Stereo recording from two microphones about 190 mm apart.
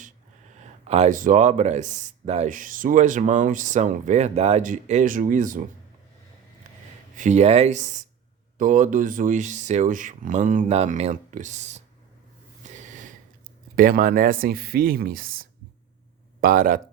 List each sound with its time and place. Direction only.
0.6 s speech: 35° right (ahead or behind)
7.2 s speech: 40° right (ahead or behind)
12.6 s snort: 40° right (ahead or behind)
13.7 s speech: 45° right (ahead or behind)